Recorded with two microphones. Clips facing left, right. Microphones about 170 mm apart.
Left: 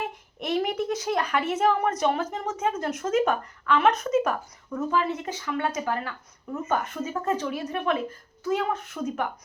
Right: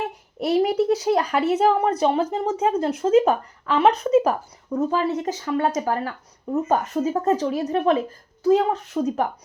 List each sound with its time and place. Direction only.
0.3 s speech: 35° right (ahead or behind)